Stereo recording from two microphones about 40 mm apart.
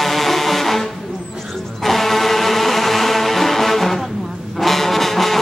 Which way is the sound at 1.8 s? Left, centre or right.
Centre.